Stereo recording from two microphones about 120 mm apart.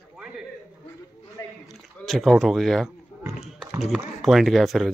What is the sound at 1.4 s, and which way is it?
Squish, 25° left (ahead or behind).